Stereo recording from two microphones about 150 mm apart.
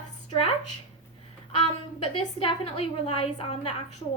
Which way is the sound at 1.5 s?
40° left (ahead or behind).